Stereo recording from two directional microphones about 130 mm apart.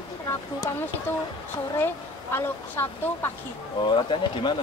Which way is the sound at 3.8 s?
40° left (ahead or behind).